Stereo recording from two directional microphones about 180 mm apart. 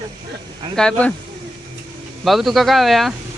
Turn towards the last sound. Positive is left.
turn(degrees=0)  # may be behind; listen again after turning